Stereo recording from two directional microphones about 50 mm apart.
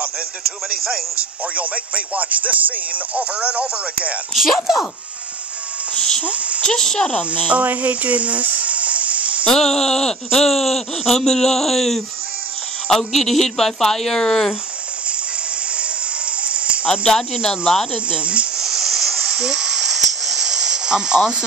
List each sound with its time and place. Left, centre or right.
1.5 s speech: right
4.3 s speech: centre
5.9 s speech: centre
6.2 s speech: right
6.6 s speech: centre
7.1 s speech: left
7.4 s a sound: right
9.5 s speech: centre
16.3 s a sound: right
16.8 s speech: left
17.5 s speech: centre
18.1 s speech: right
18.6 s a sound: centre
19.2 s snake: centre